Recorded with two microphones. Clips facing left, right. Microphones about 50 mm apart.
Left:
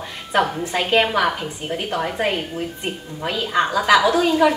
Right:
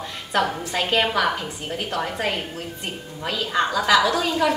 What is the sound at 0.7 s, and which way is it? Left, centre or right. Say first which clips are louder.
A woman's voice: left 3 dB; centre.